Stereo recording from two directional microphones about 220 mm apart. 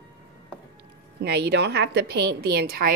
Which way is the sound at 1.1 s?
50° right (ahead or behind).